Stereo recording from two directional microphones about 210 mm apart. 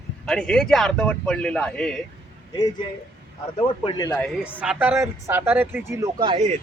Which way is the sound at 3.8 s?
15° left (ahead or behind).